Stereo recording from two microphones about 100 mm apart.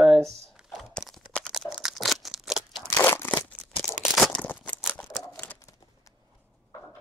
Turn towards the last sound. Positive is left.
turn(degrees=30)  # may be behind; listen again after turning